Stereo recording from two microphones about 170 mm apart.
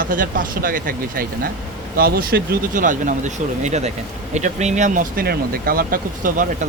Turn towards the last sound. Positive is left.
turn(degrees=-55)  # may be behind; listen again after turning